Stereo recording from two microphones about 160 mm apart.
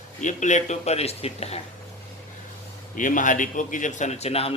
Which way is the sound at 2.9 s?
55° left (ahead or behind).